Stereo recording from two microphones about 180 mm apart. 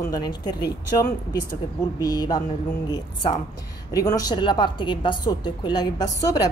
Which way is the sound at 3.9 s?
20° left (ahead or behind).